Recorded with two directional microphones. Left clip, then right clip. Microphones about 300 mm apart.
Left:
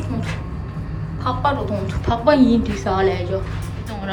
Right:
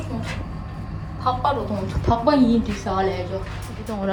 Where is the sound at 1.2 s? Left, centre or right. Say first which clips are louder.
Left 1 dB; centre.